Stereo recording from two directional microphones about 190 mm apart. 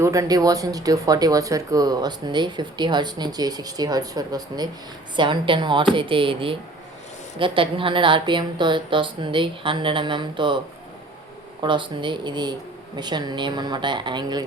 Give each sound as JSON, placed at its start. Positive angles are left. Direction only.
{"t": 0.0, "sound": "speech", "side_deg": -15}
{"t": 11.6, "sound": "speech", "side_deg": -25}